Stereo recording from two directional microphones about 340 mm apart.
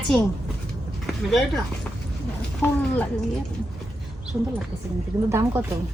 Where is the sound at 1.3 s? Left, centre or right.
Centre.